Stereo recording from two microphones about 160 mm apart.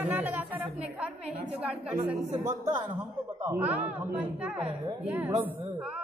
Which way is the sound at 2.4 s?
20° right (ahead or behind).